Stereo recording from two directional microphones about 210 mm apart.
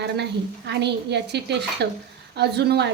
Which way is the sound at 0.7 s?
55° right (ahead or behind).